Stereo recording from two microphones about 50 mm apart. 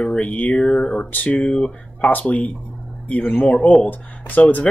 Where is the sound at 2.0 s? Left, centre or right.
Left.